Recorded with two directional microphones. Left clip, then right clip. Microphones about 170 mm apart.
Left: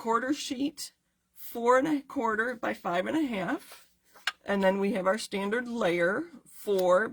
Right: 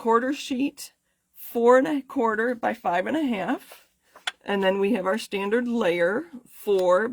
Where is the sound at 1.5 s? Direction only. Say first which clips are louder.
Right 6 dB; 40° right (ahead or behind).